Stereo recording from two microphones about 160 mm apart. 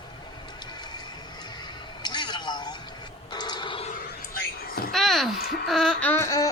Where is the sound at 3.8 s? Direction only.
65° left (ahead or behind).